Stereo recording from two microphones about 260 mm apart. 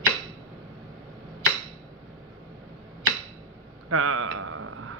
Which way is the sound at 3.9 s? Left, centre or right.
Right.